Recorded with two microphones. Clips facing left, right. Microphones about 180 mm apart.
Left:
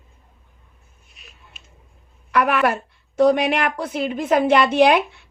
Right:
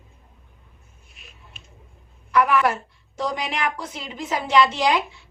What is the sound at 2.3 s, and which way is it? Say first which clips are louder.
A woman's voice: left 1 dB; 65° left (ahead or behind).